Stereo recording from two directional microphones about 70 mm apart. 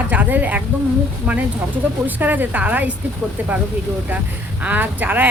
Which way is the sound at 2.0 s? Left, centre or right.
Right.